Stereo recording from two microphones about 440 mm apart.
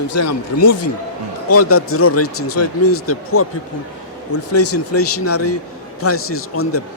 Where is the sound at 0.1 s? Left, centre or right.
Left.